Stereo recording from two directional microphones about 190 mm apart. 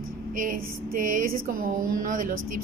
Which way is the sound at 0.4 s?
45° right (ahead or behind).